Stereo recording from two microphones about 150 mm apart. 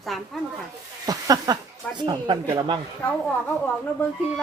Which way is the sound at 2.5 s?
30° right (ahead or behind).